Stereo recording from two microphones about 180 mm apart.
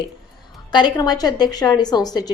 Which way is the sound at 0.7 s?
25° left (ahead or behind).